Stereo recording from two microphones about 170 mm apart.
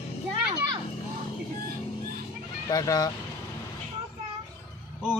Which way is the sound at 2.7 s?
20° left (ahead or behind).